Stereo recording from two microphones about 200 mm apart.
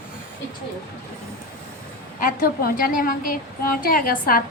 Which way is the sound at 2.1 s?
45° left (ahead or behind).